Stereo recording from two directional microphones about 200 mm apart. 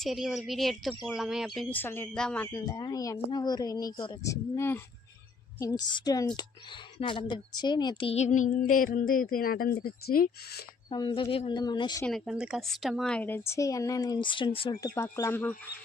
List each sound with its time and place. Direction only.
0.0 s a woman's voice: centre (ahead or behind)
1.8 s a woman's voice: 10° left (ahead or behind); by 10.6 s 50° left (ahead or behind)
10.8 s a woman's voice: 25° left (ahead or behind)
12.0 s speech: centre (ahead or behind)